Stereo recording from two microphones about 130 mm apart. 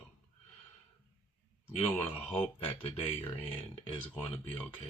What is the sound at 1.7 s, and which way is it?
Speech, 50° left (ahead or behind).